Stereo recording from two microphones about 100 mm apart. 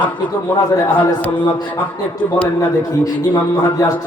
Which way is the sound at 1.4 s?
45° left (ahead or behind).